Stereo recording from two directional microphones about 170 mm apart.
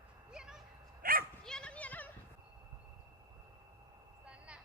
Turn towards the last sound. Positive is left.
turn(degrees=-5)  # may be behind; listen again after turning